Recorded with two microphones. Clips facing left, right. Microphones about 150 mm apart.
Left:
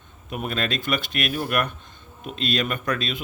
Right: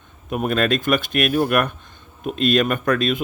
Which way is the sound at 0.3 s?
50° right (ahead or behind).